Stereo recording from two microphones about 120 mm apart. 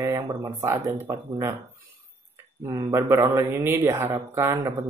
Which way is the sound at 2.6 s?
25° right (ahead or behind).